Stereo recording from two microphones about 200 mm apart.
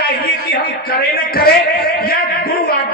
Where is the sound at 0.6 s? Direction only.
50° left (ahead or behind).